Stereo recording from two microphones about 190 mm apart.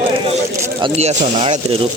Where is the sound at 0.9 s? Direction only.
35° right (ahead or behind).